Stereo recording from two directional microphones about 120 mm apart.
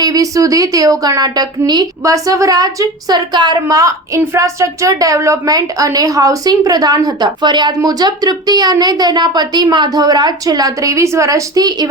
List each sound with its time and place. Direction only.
0.0 s a woman's voice: 30° right (ahead or behind)